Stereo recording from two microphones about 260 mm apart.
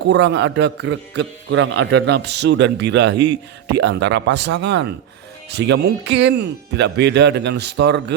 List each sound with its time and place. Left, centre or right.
0.1 s a man's voice: right